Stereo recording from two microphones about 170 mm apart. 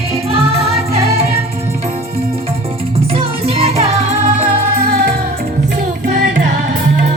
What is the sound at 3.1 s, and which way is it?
Music, 35° right (ahead or behind).